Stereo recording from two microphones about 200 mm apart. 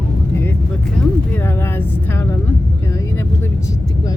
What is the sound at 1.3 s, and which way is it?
Vehicle, 10° left (ahead or behind).